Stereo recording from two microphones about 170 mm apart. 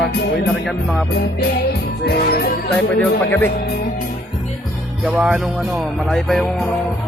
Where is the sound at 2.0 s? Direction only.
65° left (ahead or behind).